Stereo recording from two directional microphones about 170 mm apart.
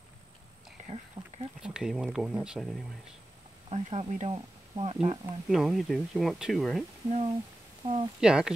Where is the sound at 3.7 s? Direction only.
40° right (ahead or behind).